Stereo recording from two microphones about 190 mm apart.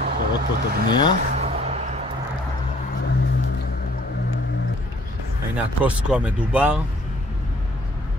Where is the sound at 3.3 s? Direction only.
65° left (ahead or behind).